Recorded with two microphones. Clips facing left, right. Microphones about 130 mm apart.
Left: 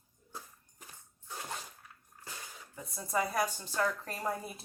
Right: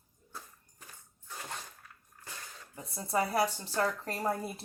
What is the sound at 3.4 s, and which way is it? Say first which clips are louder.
Speech: right 2 dB; 30° right (ahead or behind).